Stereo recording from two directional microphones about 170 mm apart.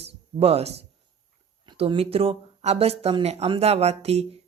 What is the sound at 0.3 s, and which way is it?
Speech, 35° right (ahead or behind).